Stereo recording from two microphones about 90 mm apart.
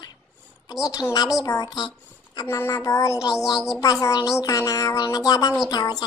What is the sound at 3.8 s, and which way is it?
A child's voice, 40° left (ahead or behind).